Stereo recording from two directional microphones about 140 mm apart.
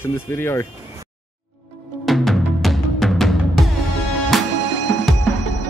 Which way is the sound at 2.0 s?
Centre (ahead or behind).